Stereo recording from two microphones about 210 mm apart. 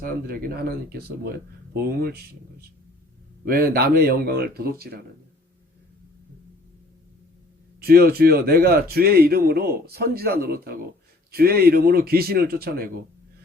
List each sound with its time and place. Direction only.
0.0 s speech: 45° right (ahead or behind)
7.8 s speech: 45° right (ahead or behind)